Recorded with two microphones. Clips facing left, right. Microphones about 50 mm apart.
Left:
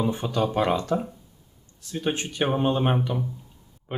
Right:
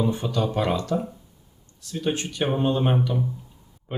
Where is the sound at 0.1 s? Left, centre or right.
Left.